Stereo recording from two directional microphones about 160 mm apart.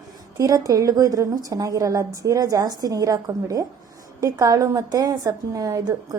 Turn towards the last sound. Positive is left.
turn(degrees=-20)  # may be behind; listen again after turning